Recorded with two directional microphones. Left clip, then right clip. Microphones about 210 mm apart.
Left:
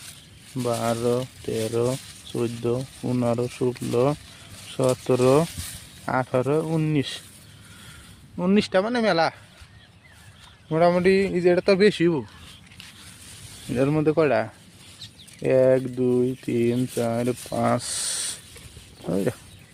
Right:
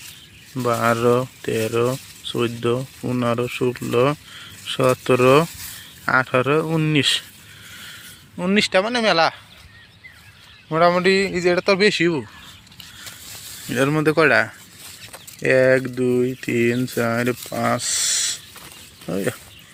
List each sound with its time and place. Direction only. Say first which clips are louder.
0.5 s speech: right 6 dB; 15° right (ahead or behind)
1.5 s speech: right 3 dB; centre (ahead or behind)
8.4 s a man's voice: right 4 dB; 10° left (ahead or behind)
10.7 s a man's voice: right 3 dB; 10° left (ahead or behind)
13.7 s speech: right 3 dB; centre (ahead or behind)
16.7 s speech: right 4 dB; 10° right (ahead or behind)
17.8 s owl: right 8 dB; 20° left (ahead or behind)
19.1 s a man's voice: right 1 dB; 5° left (ahead or behind)